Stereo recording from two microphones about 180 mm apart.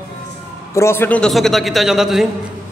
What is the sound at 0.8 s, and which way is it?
A man's voice, 15° left (ahead or behind).